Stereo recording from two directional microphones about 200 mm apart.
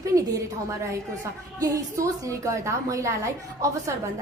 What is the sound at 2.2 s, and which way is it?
A woman's voice, 15° right (ahead or behind).